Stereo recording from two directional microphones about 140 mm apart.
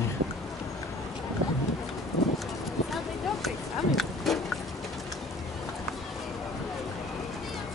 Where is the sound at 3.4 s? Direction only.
Centre (ahead or behind).